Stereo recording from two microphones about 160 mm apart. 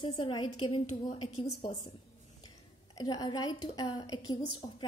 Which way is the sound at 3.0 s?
25° left (ahead or behind).